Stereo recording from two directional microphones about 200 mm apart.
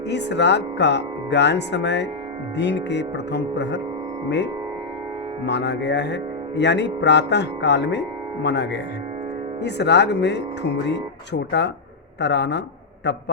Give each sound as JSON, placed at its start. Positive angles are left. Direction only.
{"t": 0.1, "sound": "speech", "side_deg": 60}
{"t": 5.5, "sound": "speech", "side_deg": 60}